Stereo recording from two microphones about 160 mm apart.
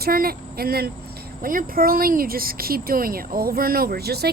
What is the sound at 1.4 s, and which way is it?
Speech, 60° right (ahead or behind).